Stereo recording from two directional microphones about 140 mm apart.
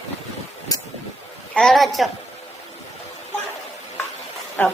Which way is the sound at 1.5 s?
Centre (ahead or behind).